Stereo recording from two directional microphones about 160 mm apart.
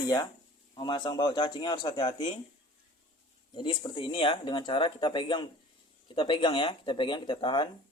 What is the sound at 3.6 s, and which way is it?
Speech, 30° left (ahead or behind).